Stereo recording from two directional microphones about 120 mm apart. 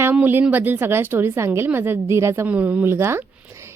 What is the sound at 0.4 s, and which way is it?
A woman's voice, 15° right (ahead or behind).